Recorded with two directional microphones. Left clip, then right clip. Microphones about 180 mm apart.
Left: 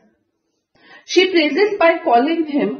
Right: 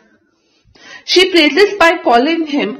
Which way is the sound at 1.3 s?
Centre (ahead or behind).